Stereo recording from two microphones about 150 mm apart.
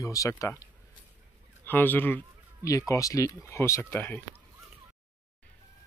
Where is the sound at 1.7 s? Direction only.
15° left (ahead or behind).